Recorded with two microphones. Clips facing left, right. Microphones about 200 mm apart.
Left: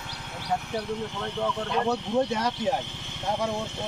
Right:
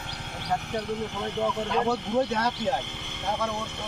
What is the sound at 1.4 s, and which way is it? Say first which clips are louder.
Speech: right 1 dB; 10° right (ahead or behind).